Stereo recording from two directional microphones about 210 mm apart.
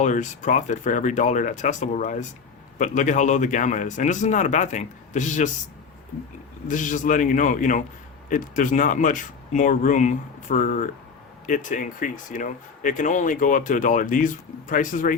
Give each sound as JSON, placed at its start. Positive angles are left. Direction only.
{"t": 0.0, "sound": "speech", "side_deg": 35}
{"t": 6.7, "sound": "speech", "side_deg": 40}